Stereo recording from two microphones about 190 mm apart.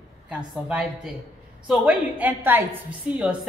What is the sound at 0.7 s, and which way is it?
A woman's voice, 5° right (ahead or behind).